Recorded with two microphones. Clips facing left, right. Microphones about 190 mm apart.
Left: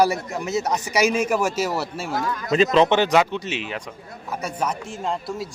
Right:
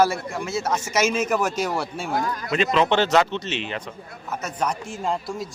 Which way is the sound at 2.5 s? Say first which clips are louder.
Left 5 dB; 35° left (ahead or behind).